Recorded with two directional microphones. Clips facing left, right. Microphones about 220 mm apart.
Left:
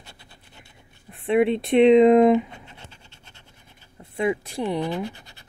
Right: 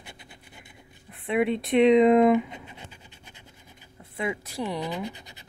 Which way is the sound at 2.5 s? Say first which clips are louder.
Right 2 dB; 15° right (ahead or behind).